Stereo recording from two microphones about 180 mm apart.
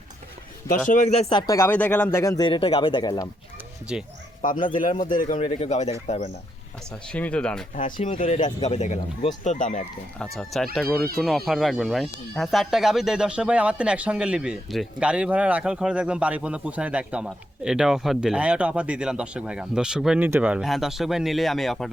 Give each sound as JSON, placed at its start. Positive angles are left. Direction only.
{"t": 0.9, "sound": "speech", "side_deg": 40}
{"t": 1.3, "sound": "speech", "side_deg": 20}
{"t": 3.9, "sound": "speech", "side_deg": -5}
{"t": 4.6, "sound": "a man's voice", "side_deg": 50}
{"t": 5.5, "sound": "speech", "side_deg": 35}
{"t": 7.1, "sound": "speech", "side_deg": 5}
{"t": 7.8, "sound": "a man's voice", "side_deg": 45}
{"t": 10.3, "sound": "speech", "side_deg": 0}
{"t": 10.8, "sound": "speech", "side_deg": -55}
{"t": 11.2, "sound": "speech", "side_deg": 0}